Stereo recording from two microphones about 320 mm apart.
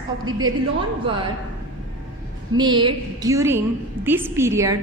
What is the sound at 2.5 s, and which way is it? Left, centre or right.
A woman's voice, centre.